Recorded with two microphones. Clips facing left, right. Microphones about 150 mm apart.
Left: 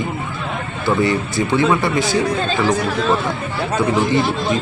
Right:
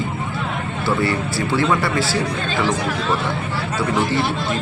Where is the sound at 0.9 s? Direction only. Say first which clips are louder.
Left 3 dB; 20° left (ahead or behind).